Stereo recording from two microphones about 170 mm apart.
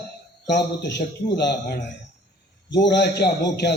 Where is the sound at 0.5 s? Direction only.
90° left.